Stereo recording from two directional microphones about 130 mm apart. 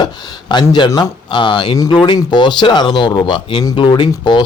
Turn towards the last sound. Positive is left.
turn(degrees=35)  # may be behind; listen again after turning